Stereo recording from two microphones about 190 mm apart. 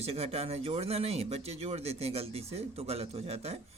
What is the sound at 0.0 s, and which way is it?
Speech, 30° right (ahead or behind).